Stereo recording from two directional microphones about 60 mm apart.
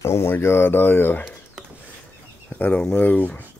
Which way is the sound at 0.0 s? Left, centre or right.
Left.